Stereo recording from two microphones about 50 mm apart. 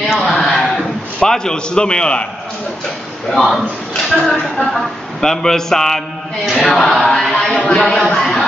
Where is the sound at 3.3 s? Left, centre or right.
Centre.